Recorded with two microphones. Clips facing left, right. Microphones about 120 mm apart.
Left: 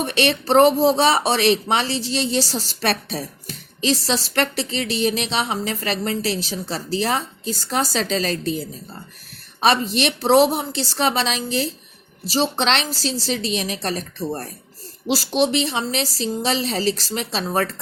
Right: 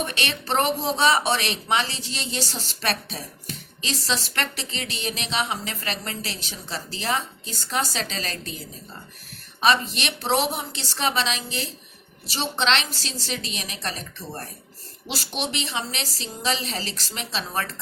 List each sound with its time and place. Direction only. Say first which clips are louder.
0.0 s a woman's voice: left 8 dB; 35° left (ahead or behind)
9.6 s a woman's voice: left 4 dB; 35° left (ahead or behind)